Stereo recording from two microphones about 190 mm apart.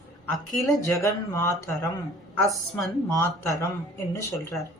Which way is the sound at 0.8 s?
15° left (ahead or behind).